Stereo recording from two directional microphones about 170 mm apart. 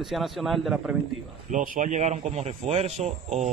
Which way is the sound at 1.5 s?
50° right (ahead or behind).